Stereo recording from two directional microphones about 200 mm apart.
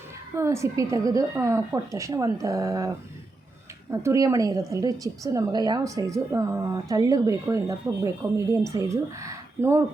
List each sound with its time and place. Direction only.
0.3 s speech: 15° right (ahead or behind)
4.0 s speech: 15° right (ahead or behind)